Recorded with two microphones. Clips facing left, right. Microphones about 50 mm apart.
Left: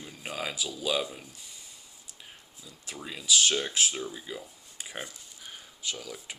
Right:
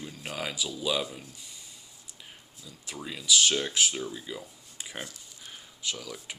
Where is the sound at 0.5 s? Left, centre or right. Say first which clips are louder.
Right 1 dB; left.